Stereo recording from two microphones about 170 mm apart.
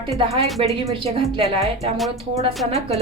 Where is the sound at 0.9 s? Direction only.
35° right (ahead or behind).